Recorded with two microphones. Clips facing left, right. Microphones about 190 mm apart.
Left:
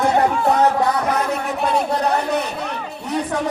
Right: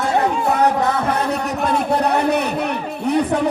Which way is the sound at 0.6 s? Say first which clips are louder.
Even; 25° right (ahead or behind).